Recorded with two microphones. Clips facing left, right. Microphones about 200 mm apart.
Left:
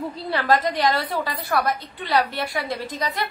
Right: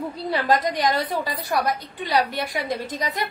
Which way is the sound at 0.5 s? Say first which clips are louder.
Left 1 dB; 15° right (ahead or behind).